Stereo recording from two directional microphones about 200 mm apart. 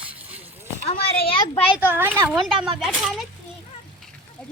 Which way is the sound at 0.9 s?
30° left (ahead or behind).